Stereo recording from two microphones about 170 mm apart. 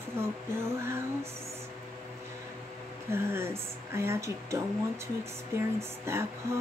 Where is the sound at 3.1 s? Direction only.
15° right (ahead or behind).